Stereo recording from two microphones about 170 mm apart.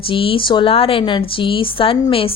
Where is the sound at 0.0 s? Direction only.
30° left (ahead or behind).